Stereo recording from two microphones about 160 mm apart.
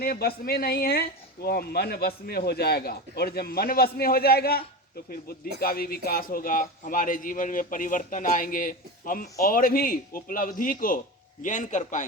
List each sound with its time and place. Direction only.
0.0 s a man's voice: 70° left (ahead or behind); by 12.0 s 50° left (ahead or behind)